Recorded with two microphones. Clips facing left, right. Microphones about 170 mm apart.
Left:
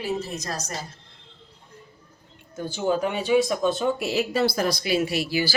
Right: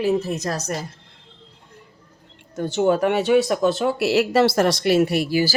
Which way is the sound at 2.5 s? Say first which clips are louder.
Right 6 dB; 70° right (ahead or behind).